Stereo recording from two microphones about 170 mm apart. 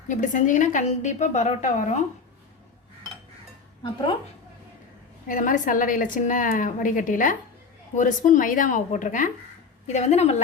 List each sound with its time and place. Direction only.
0.1 s a woman's voice: 50° left (ahead or behind)
5.3 s a woman's voice: 55° left (ahead or behind)